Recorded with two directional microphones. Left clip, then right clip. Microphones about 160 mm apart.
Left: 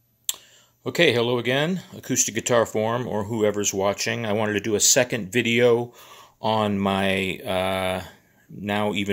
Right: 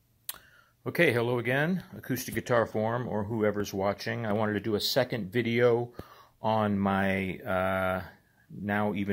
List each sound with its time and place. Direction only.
0.8 s speech: 25° left (ahead or behind)